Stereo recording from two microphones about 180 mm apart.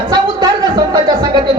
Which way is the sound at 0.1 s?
25° right (ahead or behind).